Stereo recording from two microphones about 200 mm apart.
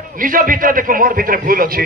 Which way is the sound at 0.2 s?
45° right (ahead or behind).